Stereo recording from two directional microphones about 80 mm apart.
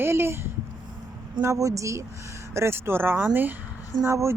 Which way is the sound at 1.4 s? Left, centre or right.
Right.